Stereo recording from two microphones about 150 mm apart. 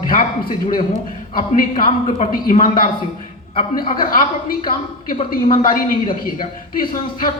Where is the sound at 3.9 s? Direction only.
65° left (ahead or behind).